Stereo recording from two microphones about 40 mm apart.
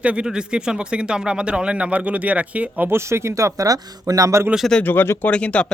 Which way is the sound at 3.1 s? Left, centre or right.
Right.